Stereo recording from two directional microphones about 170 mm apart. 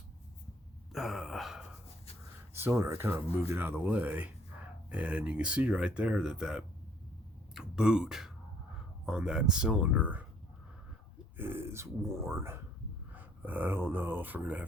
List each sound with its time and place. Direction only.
0.9 s sigh: centre (ahead or behind)
2.6 s speech: 15° right (ahead or behind)
11.3 s speech: 15° right (ahead or behind)